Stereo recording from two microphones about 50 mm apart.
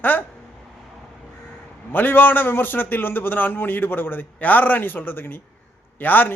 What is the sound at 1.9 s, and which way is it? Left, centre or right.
A man's voice, left.